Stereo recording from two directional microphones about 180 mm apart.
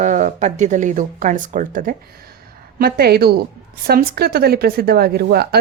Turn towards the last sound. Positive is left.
turn(degrees=-60)  # may be behind; listen again after turning